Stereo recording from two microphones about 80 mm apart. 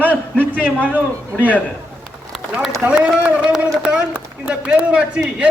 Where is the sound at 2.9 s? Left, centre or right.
Centre.